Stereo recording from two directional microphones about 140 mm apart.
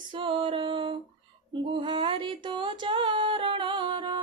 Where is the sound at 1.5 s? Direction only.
35° right (ahead or behind).